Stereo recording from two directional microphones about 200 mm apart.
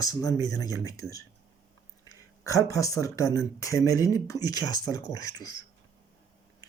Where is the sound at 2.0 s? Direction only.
15° left (ahead or behind).